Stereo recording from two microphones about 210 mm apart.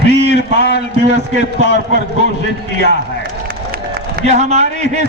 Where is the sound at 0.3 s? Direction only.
55° left (ahead or behind).